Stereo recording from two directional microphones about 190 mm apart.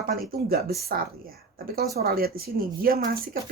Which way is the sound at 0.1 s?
50° right (ahead or behind).